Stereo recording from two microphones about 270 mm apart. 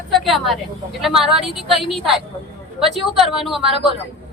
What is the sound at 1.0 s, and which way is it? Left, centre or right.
Speech, centre.